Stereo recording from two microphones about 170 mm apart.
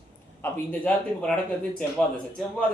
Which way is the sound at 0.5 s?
10° left (ahead or behind).